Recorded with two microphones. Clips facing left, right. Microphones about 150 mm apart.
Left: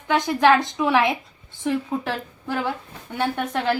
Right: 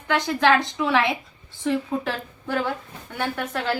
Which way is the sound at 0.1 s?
20° left (ahead or behind).